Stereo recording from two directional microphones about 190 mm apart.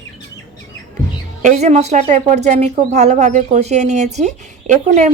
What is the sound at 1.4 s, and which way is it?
Speech, 40° right (ahead or behind).